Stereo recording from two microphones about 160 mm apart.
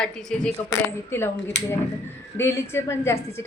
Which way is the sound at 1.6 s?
90° left.